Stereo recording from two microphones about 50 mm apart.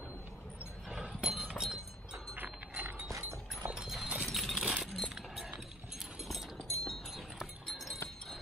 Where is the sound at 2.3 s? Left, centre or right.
Right.